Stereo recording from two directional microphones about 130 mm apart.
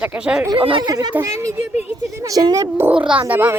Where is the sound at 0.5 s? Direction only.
40° right (ahead or behind).